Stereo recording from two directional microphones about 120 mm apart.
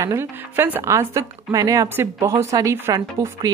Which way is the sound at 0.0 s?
20° right (ahead or behind).